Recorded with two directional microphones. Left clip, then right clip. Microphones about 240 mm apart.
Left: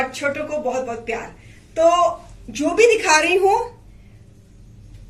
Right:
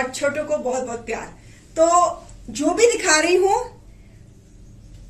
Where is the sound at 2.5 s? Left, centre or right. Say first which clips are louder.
Left 2 dB; right.